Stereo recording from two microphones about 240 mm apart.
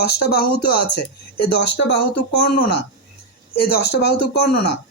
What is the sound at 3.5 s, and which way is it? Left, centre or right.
Speech, left.